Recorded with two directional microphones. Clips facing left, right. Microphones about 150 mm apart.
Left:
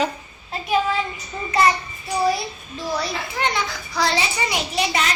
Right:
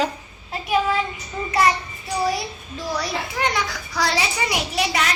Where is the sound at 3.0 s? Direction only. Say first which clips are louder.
Even; 10° right (ahead or behind).